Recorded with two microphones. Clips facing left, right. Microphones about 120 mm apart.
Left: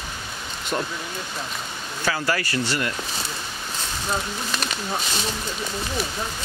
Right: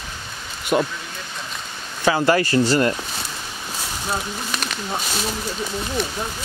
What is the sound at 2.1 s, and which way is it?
Speech, 20° right (ahead or behind).